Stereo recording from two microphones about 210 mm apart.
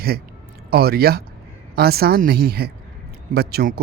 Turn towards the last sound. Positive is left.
turn(degrees=-45)  # may be behind; listen again after turning